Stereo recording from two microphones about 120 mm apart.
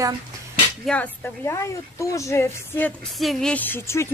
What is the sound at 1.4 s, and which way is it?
A woman's voice, 25° left (ahead or behind).